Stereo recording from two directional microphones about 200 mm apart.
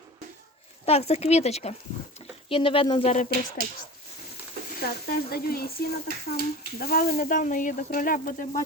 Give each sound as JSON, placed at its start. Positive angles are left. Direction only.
{"t": 0.9, "sound": "speech", "side_deg": 30}
{"t": 4.8, "sound": "speech", "side_deg": 50}